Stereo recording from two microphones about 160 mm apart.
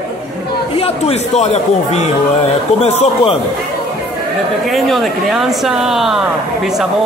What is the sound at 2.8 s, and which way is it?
Speech, 40° left (ahead or behind).